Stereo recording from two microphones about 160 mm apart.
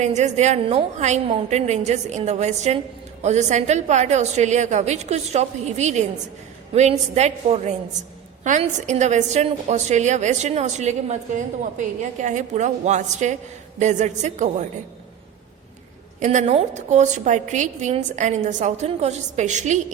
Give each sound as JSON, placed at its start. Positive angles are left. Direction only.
{"t": 0.0, "sound": "a woman's voice", "side_deg": -45}
{"t": 16.2, "sound": "a woman's voice", "side_deg": -50}